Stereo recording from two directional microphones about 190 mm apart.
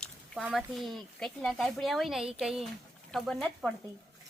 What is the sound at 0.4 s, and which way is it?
Speech, centre (ahead or behind).